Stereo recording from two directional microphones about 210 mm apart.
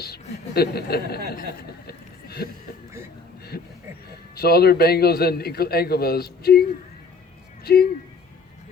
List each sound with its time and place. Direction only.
0.0 s a woman's voice: 50° left (ahead or behind)
1.4 s chuckle: 50° left (ahead or behind)
3.5 s a sound: 45° left (ahead or behind)
4.4 s a man's voice: 50° left (ahead or behind)